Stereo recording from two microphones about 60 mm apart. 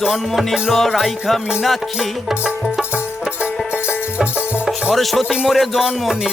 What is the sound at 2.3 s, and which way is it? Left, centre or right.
Music, centre.